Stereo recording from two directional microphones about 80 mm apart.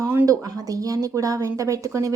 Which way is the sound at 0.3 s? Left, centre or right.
Right.